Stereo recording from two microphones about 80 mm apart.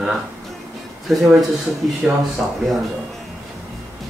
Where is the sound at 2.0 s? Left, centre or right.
Centre.